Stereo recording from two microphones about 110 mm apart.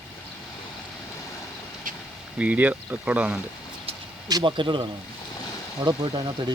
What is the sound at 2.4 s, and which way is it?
Speech, 15° right (ahead or behind).